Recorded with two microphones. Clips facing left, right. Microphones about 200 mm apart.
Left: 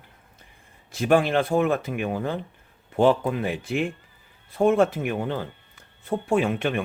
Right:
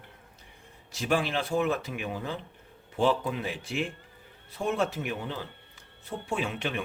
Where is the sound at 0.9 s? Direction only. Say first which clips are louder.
Left 8 dB; 55° left (ahead or behind).